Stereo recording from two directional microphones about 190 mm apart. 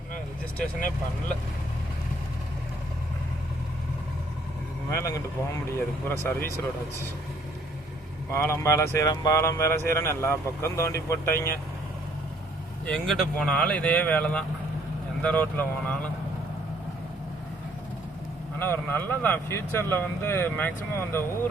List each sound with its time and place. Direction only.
4.9 s speech: 15° left (ahead or behind)
8.3 s speech: 15° left (ahead or behind)
12.8 s speech: 5° left (ahead or behind)
18.6 s speech: 10° left (ahead or behind)